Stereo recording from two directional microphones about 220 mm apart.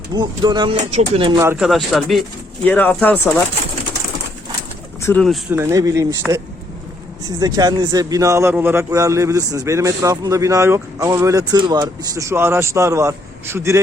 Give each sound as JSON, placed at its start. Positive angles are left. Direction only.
{"t": 0.1, "sound": "speech", "side_deg": -20}
{"t": 1.4, "sound": "speech", "side_deg": -5}
{"t": 5.0, "sound": "speech", "side_deg": 5}
{"t": 5.5, "sound": "a man's voice", "side_deg": -15}